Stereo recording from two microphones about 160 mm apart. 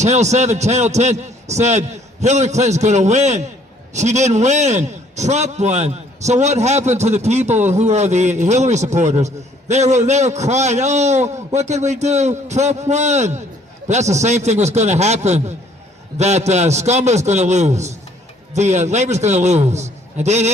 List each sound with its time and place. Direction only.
0.0 s a man's voice: 45° right (ahead or behind)